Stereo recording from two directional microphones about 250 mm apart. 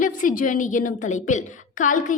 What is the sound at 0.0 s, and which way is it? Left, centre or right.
A woman's voice, left.